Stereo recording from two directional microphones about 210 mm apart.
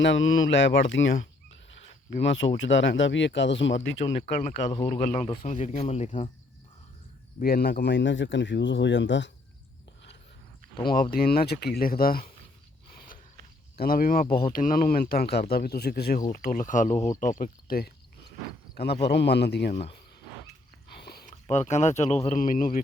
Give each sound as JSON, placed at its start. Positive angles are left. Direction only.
{"t": 0.0, "sound": "speech", "side_deg": 65}
{"t": 2.0, "sound": "speech", "side_deg": 55}
{"t": 4.4, "sound": "speech", "side_deg": 35}
{"t": 7.3, "sound": "speech", "side_deg": 45}
{"t": 10.8, "sound": "speech", "side_deg": 45}
{"t": 13.7, "sound": "speech", "side_deg": 45}
{"t": 20.9, "sound": "a sound", "side_deg": 50}
{"t": 21.4, "sound": "speech", "side_deg": 35}